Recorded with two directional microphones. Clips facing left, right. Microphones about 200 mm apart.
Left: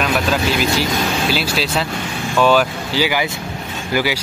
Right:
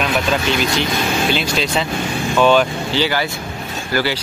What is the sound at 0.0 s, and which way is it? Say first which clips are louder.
Speech: even; 5° left (ahead or behind).